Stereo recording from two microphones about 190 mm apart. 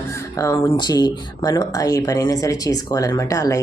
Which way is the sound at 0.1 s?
15° left (ahead or behind).